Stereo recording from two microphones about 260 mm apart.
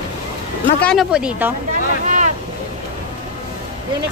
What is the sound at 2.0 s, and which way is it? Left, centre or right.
Boat, right.